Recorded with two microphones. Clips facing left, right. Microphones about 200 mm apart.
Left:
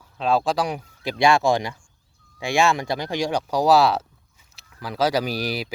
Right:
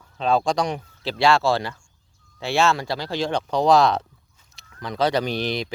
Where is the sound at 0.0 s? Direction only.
5° left (ahead or behind).